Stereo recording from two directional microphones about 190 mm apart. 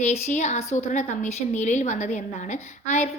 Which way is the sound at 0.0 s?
35° left (ahead or behind).